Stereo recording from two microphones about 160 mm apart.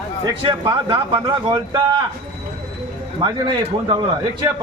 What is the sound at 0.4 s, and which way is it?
A man's voice, 30° right (ahead or behind).